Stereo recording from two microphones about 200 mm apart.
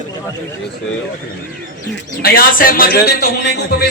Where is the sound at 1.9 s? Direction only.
50° left (ahead or behind).